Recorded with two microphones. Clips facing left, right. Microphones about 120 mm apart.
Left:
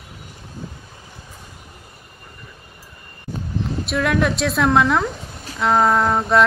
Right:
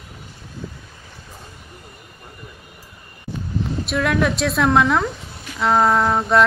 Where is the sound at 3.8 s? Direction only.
Centre (ahead or behind).